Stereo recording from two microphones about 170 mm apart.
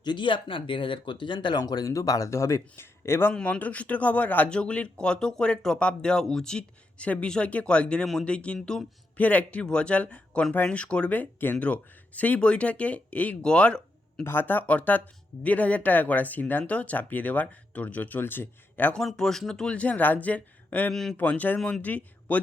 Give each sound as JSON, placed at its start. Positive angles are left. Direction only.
{"t": 0.0, "sound": "speech", "side_deg": 25}